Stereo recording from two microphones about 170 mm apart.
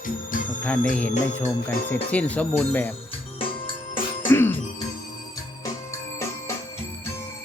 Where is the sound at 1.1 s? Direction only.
45° left (ahead or behind).